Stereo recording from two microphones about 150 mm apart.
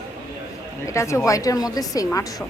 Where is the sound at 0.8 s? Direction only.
20° left (ahead or behind).